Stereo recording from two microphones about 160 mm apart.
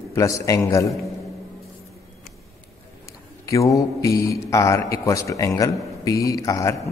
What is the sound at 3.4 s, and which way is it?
A man's voice, 20° left (ahead or behind).